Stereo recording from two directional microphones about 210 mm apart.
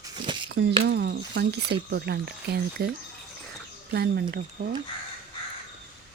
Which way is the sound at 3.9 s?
50° right (ahead or behind).